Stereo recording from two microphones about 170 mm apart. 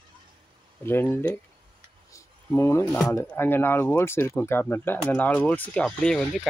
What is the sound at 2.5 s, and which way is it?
Speech, 15° left (ahead or behind).